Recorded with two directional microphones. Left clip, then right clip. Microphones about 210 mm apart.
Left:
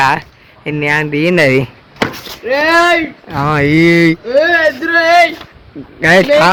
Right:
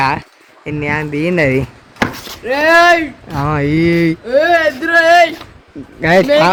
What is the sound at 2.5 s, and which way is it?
Speech, 35° right (ahead or behind).